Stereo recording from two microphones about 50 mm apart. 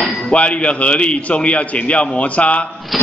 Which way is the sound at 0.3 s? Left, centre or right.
Left.